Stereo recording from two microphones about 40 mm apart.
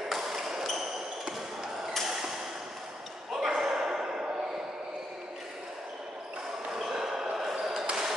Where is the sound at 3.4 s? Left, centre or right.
Centre.